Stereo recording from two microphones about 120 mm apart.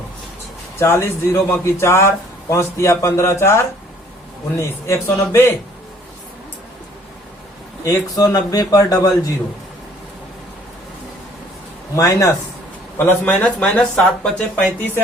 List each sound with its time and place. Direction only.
0.8 s a man's voice: 20° left (ahead or behind)
7.9 s a man's voice: 30° left (ahead or behind)
11.9 s a man's voice: 25° left (ahead or behind)
13.0 s speech: 15° left (ahead or behind)